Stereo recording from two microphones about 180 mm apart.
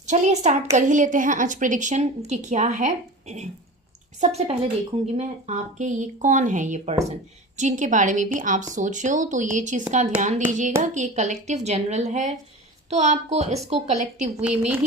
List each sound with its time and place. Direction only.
0.0 s a woman's voice: 40° right (ahead or behind)
14.4 s a woman's voice: 5° right (ahead or behind)